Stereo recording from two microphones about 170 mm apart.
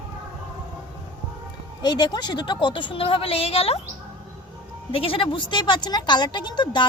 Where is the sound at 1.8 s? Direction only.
25° left (ahead or behind).